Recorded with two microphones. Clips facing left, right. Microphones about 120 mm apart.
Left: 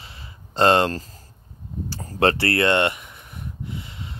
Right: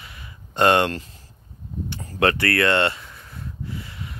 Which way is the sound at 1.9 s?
35° left (ahead or behind).